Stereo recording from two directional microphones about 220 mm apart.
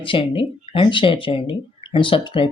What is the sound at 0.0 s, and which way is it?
Speech, 25° left (ahead or behind).